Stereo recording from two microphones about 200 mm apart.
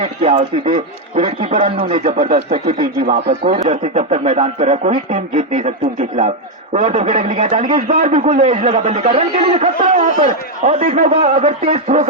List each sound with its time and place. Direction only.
0.0 s a man's voice: 30° right (ahead or behind)
3.5 s a man's voice: 40° right (ahead or behind)